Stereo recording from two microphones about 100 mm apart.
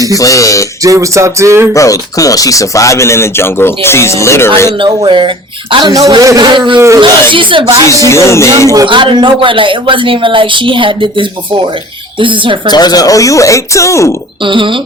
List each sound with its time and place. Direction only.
0.2 s speech: 35° left (ahead or behind)
0.8 s speech: 35° right (ahead or behind)
1.7 s speech: 35° left (ahead or behind)
4.8 s speech: 60° right (ahead or behind)
5.9 s speech: 40° right (ahead or behind)
6.4 s insect: 50° right (ahead or behind)
7.0 s speech: 55° right (ahead or behind)
8.1 s speech: 30° left (ahead or behind)
8.9 s speech: 55° right (ahead or behind)
12.7 s speech: 45° left (ahead or behind)
14.4 s speech: 55° right (ahead or behind)